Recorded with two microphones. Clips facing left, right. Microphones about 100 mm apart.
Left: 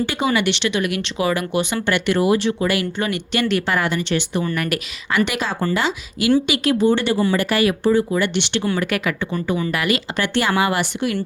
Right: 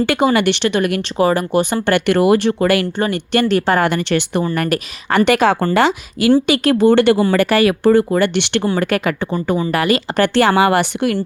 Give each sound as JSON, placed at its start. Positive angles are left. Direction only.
{"t": 0.0, "sound": "speech", "side_deg": -60}
{"t": 0.3, "sound": "speech", "side_deg": -45}
{"t": 3.0, "sound": "speech", "side_deg": -40}
{"t": 4.5, "sound": "speech", "side_deg": -45}
{"t": 5.2, "sound": "speech", "side_deg": -60}
{"t": 8.7, "sound": "speech", "side_deg": -45}
{"t": 10.3, "sound": "speech", "side_deg": -65}